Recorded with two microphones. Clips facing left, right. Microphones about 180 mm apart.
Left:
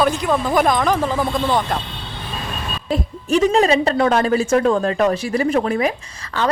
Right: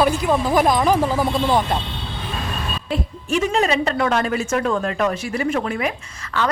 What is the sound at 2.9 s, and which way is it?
A woman's voice, 35° left (ahead or behind).